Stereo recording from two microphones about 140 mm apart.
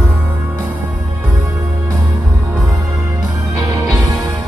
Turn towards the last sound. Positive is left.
turn(degrees=-30)  # may be behind; listen again after turning